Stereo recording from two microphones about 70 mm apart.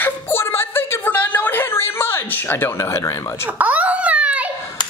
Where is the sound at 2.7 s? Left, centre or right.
Left.